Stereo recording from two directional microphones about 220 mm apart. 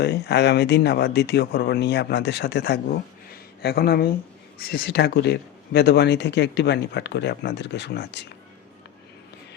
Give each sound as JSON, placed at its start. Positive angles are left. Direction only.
{"t": 0.0, "sound": "speech", "side_deg": 50}